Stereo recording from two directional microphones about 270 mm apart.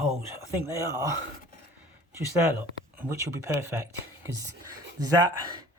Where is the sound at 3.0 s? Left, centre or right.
Centre.